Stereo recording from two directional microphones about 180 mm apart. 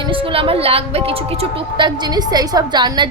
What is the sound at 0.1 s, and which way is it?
A woman's voice, 30° right (ahead or behind).